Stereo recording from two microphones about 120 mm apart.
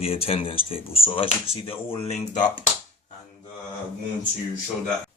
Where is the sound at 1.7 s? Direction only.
65° left (ahead or behind); by 2.6 s 80° left.